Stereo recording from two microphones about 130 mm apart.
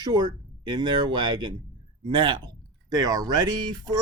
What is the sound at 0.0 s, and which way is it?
Speech, 35° right (ahead or behind).